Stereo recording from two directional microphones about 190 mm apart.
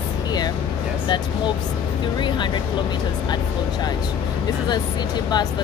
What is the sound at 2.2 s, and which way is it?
Speech, 25° left (ahead or behind).